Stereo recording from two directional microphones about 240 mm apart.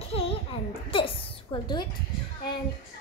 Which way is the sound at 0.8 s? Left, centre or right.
Left.